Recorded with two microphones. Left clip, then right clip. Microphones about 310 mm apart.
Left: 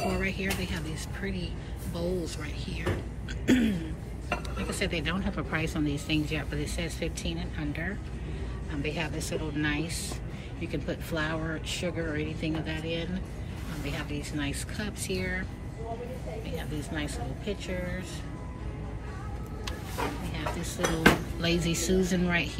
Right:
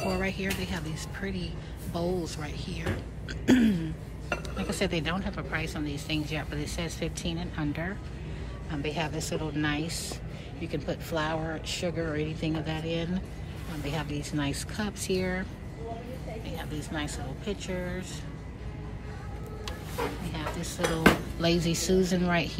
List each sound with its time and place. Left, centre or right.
0.0 s music: centre
0.6 s speech: centre
16.4 s speech: centre
21.5 s speech: centre
21.7 s speech: right
22.1 s speech: centre